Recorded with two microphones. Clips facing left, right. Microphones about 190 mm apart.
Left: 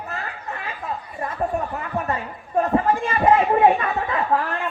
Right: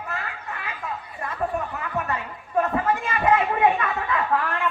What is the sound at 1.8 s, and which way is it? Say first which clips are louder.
Speech: left 3 dB; 35° left (ahead or behind).